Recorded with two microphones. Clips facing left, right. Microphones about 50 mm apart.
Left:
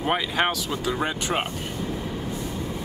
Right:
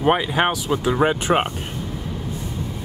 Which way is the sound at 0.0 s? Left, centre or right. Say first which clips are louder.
Right 5 dB; centre.